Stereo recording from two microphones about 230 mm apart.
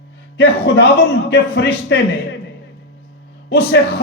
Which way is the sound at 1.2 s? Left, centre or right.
Left.